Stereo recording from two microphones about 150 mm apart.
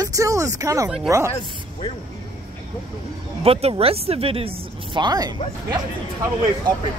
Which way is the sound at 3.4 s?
40° right (ahead or behind).